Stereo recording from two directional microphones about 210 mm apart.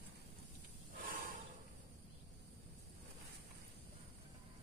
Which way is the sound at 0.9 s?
40° right (ahead or behind).